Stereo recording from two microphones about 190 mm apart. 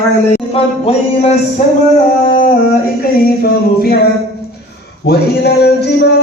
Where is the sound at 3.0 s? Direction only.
55° left (ahead or behind).